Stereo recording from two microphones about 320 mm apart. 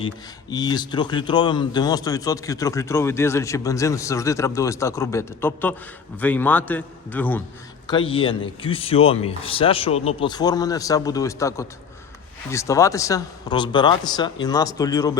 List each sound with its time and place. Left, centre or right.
0.5 s a man's voice: centre
7.9 s speech: centre